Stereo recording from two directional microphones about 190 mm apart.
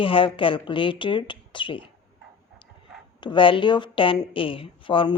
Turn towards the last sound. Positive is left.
turn(degrees=25)  # may be behind; listen again after turning